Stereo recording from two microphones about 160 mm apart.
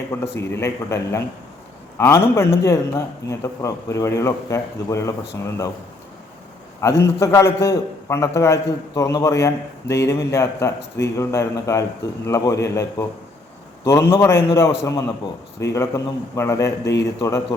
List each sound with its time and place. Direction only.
0.1 s a man's voice: 15° left (ahead or behind)
6.8 s a man's voice: 20° left (ahead or behind)